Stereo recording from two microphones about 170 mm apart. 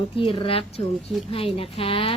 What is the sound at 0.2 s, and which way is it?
A woman's voice, 30° left (ahead or behind).